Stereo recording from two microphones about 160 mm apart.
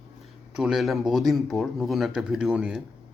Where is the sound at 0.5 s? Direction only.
Centre (ahead or behind).